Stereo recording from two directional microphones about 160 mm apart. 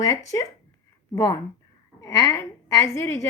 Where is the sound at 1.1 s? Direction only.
20° left (ahead or behind).